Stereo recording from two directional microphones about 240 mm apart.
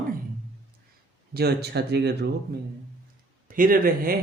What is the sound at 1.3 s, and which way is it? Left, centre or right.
Speech, right.